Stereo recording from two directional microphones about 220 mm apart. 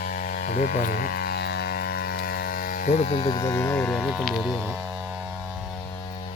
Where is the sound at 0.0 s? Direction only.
40° left (ahead or behind); by 3.5 s 20° left (ahead or behind).